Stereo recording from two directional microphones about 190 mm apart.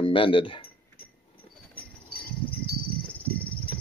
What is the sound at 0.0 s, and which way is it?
Speech, 25° left (ahead or behind).